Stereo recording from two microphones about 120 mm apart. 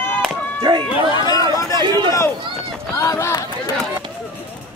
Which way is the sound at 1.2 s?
30° left (ahead or behind).